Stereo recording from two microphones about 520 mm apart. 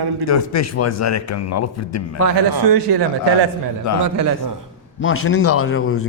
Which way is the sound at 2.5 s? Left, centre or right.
Right.